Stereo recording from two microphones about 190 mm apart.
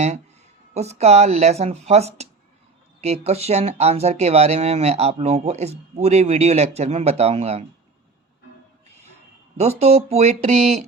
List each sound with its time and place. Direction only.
0.7 s speech: 35° right (ahead or behind)
9.6 s speech: 35° right (ahead or behind)